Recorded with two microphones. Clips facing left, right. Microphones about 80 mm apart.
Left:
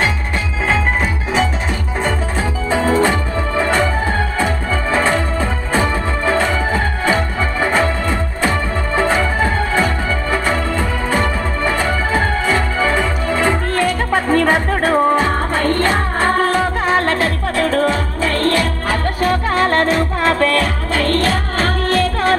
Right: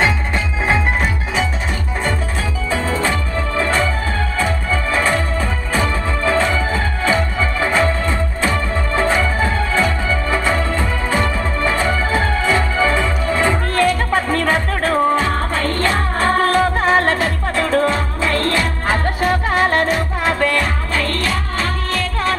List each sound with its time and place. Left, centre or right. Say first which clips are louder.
2.7 s music: left 5 dB; centre
7.6 s organ: left 1 dB; centre
11.1 s music: left 1 dB; centre
16.9 s music: left 2 dB; right
17.6 s music: even; right
18.2 s music: left 2 dB; left
18.9 s music: right 1 dB; right
20.9 s music: left 6 dB; left